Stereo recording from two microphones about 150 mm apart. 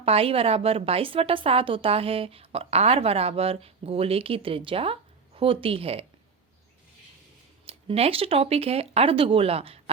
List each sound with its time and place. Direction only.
0.0 s a woman's voice: 40° right (ahead or behind)
7.6 s a woman's voice: 40° right (ahead or behind)